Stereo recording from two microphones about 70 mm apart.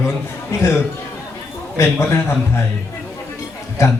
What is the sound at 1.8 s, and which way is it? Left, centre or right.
Speech, left.